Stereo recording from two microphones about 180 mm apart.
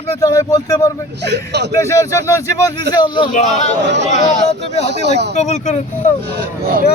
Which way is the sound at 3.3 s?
40° left (ahead or behind).